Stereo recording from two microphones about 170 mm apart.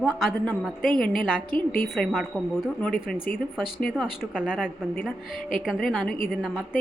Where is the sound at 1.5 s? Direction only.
55° left (ahead or behind).